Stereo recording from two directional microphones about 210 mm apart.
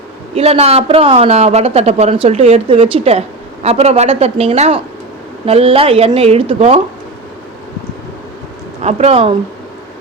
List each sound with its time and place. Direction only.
0.3 s speech: 30° right (ahead or behind)
8.8 s speech: 30° right (ahead or behind)